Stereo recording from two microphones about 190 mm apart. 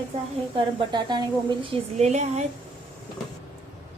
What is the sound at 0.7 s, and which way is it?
A woman's voice, 20° right (ahead or behind).